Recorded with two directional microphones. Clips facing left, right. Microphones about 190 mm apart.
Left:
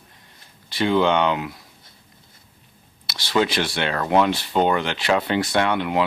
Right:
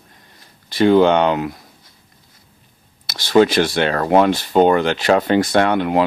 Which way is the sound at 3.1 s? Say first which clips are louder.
Right 8 dB; 45° right (ahead or behind).